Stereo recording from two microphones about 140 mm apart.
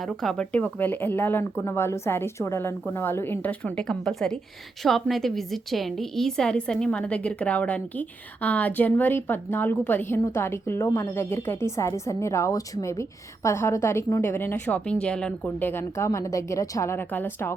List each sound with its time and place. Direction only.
0.0 s a woman's voice: centre (ahead or behind)